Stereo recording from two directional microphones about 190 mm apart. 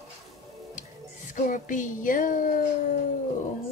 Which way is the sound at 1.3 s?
40° left (ahead or behind).